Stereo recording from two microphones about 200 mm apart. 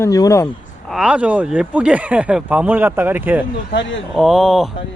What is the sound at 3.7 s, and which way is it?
Speech, 65° left (ahead or behind).